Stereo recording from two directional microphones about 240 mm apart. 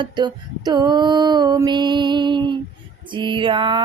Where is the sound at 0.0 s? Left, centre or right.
Centre.